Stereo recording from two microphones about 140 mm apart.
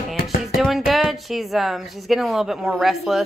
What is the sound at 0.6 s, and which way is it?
Speech, centre (ahead or behind).